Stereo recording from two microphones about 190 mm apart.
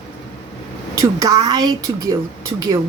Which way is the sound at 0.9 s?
20° right (ahead or behind).